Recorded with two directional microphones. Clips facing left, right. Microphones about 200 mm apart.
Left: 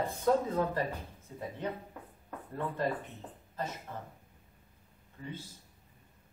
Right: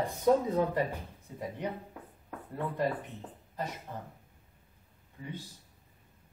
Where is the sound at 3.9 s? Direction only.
10° right (ahead or behind).